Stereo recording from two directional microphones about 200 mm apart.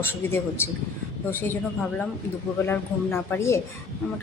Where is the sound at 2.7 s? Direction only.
10° left (ahead or behind).